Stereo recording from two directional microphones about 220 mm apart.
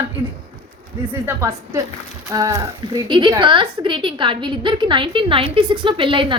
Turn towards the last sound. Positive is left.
turn(degrees=-25)  # may be behind; listen again after turning